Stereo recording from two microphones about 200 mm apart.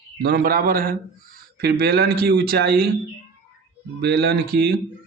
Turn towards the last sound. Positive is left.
turn(degrees=-55)  # may be behind; listen again after turning